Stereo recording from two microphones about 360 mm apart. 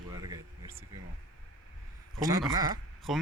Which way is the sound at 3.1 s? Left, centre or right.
Centre.